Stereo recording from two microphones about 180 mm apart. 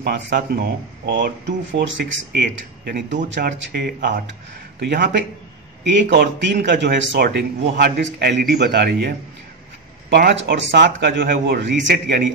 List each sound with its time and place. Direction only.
0.0 s speech: 60° right (ahead or behind)
4.7 s speech: 65° right (ahead or behind)
5.9 s speech: 85° right; by 12.3 s 70° right (ahead or behind)